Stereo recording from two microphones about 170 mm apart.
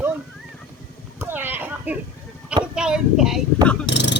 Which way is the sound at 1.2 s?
10° right (ahead or behind).